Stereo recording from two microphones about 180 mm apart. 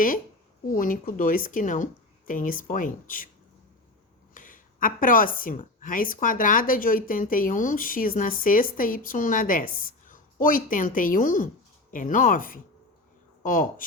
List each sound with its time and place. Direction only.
0.7 s speech: 50° left (ahead or behind)
4.4 s speech: 50° left (ahead or behind)